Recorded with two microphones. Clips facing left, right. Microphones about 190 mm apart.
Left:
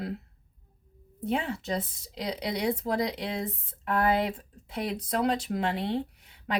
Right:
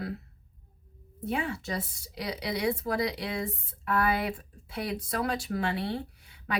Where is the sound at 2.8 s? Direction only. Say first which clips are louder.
Left 1 dB; 30° left (ahead or behind).